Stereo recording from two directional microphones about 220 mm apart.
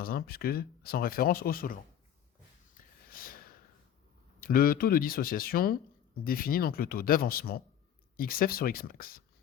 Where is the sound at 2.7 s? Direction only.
40° left (ahead or behind).